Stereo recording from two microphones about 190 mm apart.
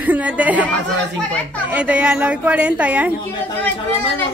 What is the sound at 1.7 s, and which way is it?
A woman's voice, 5° right (ahead or behind).